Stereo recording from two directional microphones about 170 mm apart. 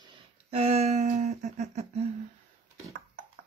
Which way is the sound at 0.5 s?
35° right (ahead or behind).